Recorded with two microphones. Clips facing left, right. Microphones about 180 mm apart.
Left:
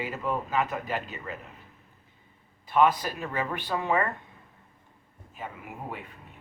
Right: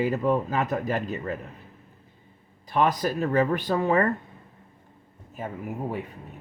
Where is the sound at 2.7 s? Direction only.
40° right (ahead or behind).